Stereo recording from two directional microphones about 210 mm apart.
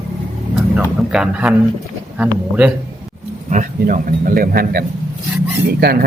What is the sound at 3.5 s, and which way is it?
Speech, 40° right (ahead or behind).